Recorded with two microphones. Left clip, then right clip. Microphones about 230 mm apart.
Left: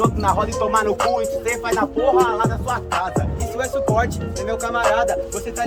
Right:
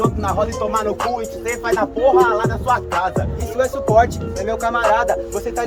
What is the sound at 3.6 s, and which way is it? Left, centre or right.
Speech, right.